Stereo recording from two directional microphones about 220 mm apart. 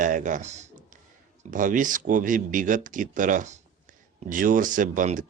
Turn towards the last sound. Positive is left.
turn(degrees=-35)  # may be behind; listen again after turning